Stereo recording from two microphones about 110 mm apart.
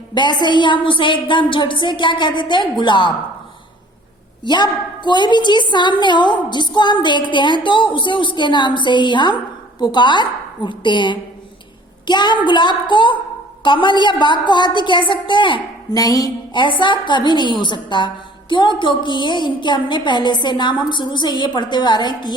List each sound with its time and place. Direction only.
0.1 s a woman's voice: 45° left (ahead or behind)
4.4 s a woman's voice: 45° left (ahead or behind)
15.9 s music: 35° left (ahead or behind)
16.5 s a woman's voice: 45° left (ahead or behind)